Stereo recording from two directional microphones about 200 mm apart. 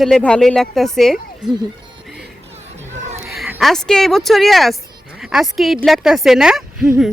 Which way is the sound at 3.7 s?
5° left (ahead or behind).